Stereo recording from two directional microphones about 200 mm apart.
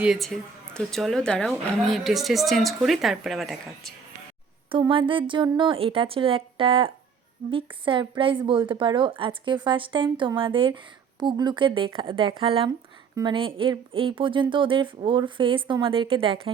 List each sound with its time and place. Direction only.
0.0 s a woman's voice: centre (ahead or behind)
4.7 s a woman's voice: 25° right (ahead or behind)